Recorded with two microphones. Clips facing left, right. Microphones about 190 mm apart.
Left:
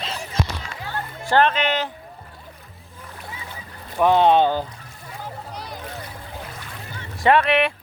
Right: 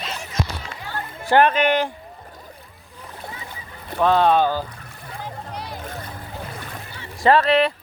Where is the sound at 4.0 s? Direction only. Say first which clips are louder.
Left 1 dB; 20° left (ahead or behind).